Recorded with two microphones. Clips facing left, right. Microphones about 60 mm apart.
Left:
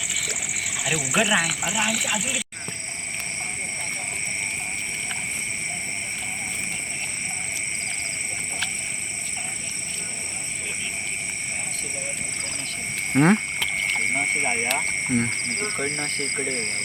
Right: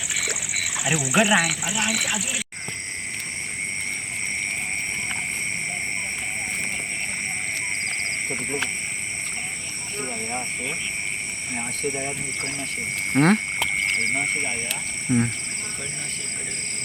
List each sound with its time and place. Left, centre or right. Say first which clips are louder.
0.3 s speech: right 1 dB; centre
1.6 s speech: left 1 dB; centre
13.1 s speech: even; centre
14.4 s speech: left 4 dB; left
15.1 s speech: right 3 dB; centre
15.4 s speech: left 6 dB; left